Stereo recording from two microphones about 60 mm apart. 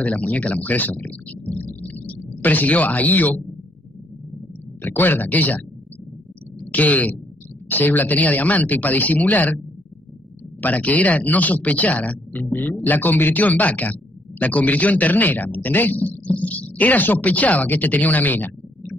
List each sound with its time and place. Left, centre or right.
0.0 s speech: left
4.8 s speech: left
10.6 s speech: left